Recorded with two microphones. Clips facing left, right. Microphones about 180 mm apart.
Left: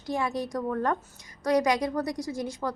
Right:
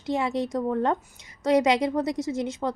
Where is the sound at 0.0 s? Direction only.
25° right (ahead or behind).